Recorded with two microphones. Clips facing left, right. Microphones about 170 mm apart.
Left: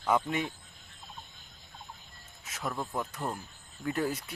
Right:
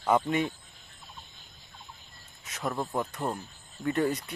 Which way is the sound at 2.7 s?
20° right (ahead or behind).